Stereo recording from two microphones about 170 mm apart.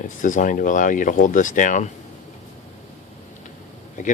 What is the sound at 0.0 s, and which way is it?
Speech, 50° left (ahead or behind).